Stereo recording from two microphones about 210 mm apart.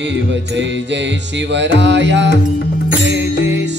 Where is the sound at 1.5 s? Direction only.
60° right (ahead or behind).